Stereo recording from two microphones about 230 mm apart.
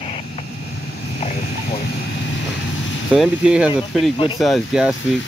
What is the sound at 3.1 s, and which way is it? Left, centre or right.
Speech, centre.